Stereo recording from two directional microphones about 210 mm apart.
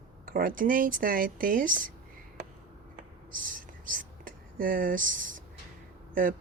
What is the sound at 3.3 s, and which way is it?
Whispering, 40° right (ahead or behind).